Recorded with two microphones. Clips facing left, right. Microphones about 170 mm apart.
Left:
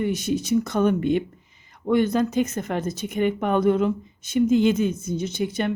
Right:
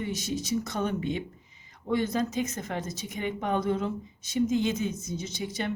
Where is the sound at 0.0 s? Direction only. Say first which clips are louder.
Left 8 dB; 60° left (ahead or behind).